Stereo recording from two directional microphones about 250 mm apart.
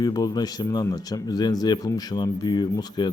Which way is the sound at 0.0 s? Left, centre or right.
Centre.